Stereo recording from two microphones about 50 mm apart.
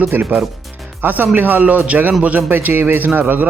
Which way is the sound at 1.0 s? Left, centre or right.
Right.